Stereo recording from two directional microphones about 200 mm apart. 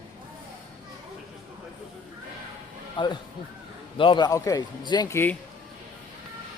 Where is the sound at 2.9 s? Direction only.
25° left (ahead or behind).